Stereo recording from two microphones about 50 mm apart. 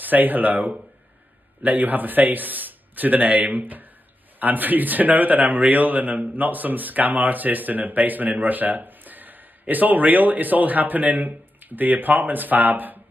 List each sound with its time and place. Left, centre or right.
0.0 s speech: right